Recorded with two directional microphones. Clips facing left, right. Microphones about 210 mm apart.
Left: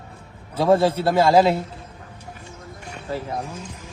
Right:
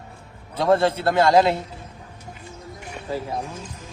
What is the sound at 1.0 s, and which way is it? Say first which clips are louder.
Speech: left 1 dB; 5° left (ahead or behind).